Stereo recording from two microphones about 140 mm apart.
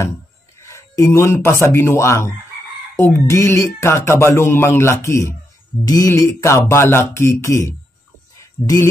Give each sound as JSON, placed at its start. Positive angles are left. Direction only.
{"t": 0.6, "sound": "speech", "side_deg": 20}
{"t": 3.0, "sound": "music", "side_deg": 20}